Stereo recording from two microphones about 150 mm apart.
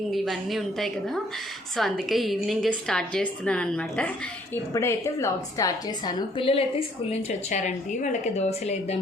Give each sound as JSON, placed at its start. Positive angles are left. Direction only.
{"t": 0.1, "sound": "a woman's voice", "side_deg": 0}
{"t": 4.5, "sound": "a woman's voice", "side_deg": 20}